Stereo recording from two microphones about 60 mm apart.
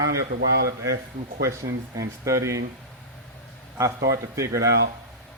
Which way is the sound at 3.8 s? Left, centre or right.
Right.